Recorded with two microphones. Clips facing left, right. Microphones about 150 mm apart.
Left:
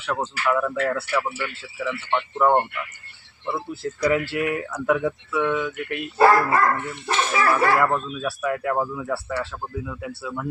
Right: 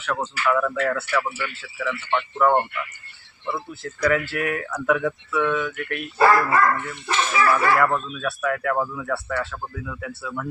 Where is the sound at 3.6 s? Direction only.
30° left (ahead or behind).